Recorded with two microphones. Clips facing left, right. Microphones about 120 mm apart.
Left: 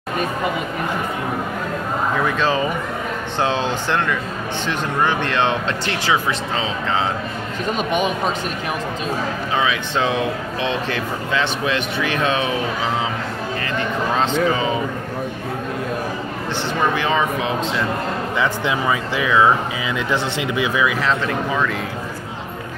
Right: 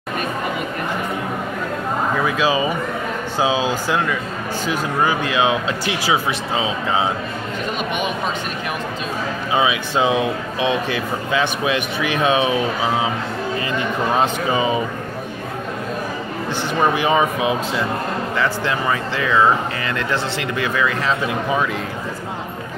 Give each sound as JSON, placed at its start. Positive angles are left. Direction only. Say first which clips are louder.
{"t": 2.2, "sound": "speech", "louder": "right 1 dB", "side_deg": -5}
{"t": 9.5, "sound": "speech", "louder": "right 3 dB", "side_deg": -10}
{"t": 16.9, "sound": "speech", "louder": "right 2 dB", "side_deg": -15}
{"t": 18.4, "sound": "speech", "louder": "left 1 dB", "side_deg": 15}
{"t": 21.3, "sound": "speech", "louder": "right 1 dB", "side_deg": -15}